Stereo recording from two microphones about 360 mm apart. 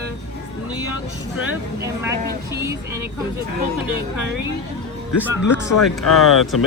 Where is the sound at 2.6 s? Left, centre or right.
Centre.